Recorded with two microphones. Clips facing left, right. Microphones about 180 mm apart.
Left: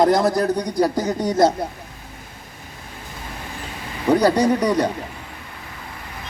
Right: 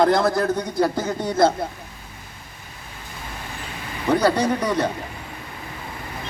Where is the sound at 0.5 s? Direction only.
40° left (ahead or behind).